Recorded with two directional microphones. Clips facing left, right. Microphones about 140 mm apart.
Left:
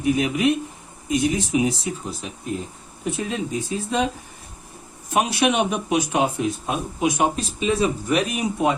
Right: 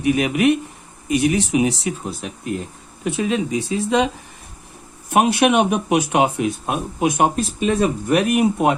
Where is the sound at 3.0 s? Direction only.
90° right.